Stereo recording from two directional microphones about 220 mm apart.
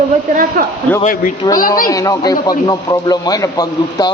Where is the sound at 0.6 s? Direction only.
40° right (ahead or behind).